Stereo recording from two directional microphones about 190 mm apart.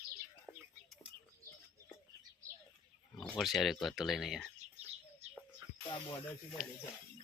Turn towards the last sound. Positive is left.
turn(degrees=20)  # may be behind; listen again after turning